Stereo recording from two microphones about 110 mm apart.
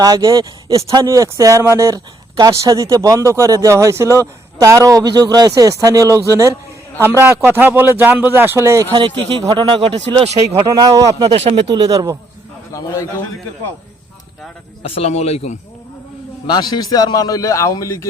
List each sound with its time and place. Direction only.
0.0 s a man's voice: 35° right (ahead or behind)
8.9 s speech: 50° right (ahead or behind)
10.7 s speech: 35° right (ahead or behind)
11.3 s speech: 70° right (ahead or behind)
11.7 s speech: 35° right (ahead or behind)
12.7 s a man's voice: 30° left (ahead or behind)
14.8 s a man's voice: 65° left (ahead or behind)
16.5 s a man's voice: 40° left (ahead or behind)